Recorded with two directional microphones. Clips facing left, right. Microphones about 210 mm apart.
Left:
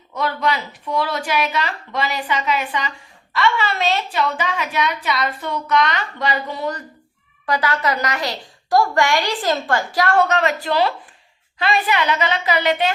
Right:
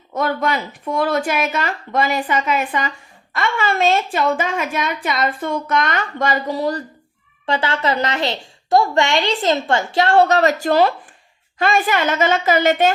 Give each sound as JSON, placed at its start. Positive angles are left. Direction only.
{"t": 0.1, "sound": "a woman's voice", "side_deg": -50}